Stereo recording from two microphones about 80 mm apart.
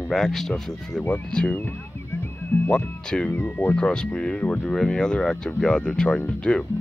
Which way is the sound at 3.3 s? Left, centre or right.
Left.